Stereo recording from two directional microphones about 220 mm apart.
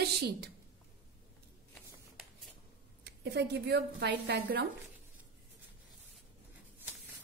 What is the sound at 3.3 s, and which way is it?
A woman's voice, 50° right (ahead or behind).